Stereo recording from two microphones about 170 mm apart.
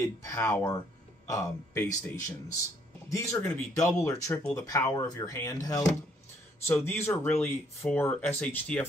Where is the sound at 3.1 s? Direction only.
15° left (ahead or behind).